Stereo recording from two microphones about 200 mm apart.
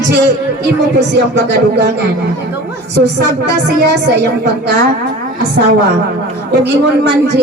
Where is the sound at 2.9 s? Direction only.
55° right (ahead or behind).